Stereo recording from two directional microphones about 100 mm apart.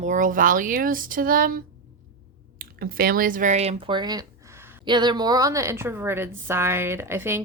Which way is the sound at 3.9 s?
45° right (ahead or behind).